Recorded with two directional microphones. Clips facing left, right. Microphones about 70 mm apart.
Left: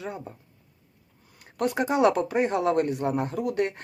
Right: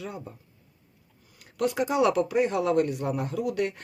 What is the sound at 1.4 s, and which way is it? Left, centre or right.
Speech, left.